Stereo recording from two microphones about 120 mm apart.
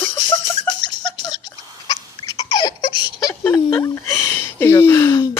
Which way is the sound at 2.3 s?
35° left (ahead or behind).